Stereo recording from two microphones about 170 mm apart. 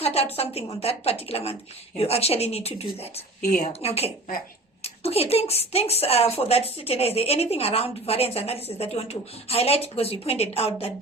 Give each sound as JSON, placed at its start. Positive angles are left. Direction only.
{"t": 0.0, "sound": "a woman's voice", "side_deg": 35}